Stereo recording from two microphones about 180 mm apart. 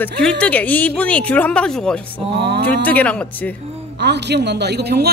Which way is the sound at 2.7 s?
10° left (ahead or behind).